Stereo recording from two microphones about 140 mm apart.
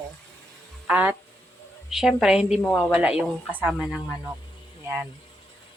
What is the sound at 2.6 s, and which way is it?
Speech, 10° left (ahead or behind).